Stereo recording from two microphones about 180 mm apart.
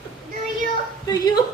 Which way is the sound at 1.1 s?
20° left (ahead or behind).